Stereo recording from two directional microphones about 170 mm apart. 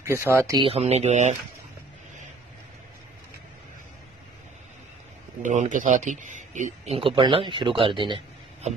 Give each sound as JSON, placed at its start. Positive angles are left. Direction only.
{"t": 0.0, "sound": "speech", "side_deg": -15}
{"t": 0.6, "sound": "speech", "side_deg": -35}
{"t": 5.4, "sound": "speech", "side_deg": -45}